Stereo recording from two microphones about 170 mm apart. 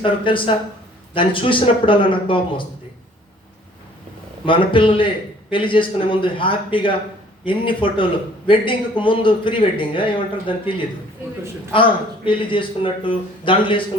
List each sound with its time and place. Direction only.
0.0 s a man's voice: 30° left (ahead or behind)
4.4 s a man's voice: 30° left (ahead or behind)